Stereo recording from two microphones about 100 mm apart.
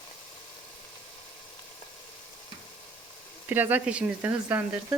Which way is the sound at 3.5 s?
20° right (ahead or behind).